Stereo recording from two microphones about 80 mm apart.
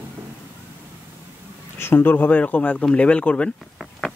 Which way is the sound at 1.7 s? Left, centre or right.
Left.